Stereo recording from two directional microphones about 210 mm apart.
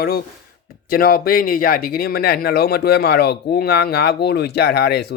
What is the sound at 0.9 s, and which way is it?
Speech, 45° left (ahead or behind).